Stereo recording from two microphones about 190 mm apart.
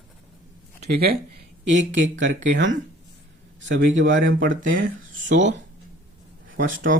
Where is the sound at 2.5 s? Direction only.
75° right (ahead or behind).